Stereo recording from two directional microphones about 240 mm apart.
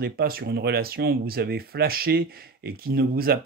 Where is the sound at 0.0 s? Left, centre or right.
Right.